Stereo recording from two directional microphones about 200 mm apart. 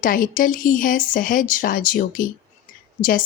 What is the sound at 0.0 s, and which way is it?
Speech, 40° left (ahead or behind).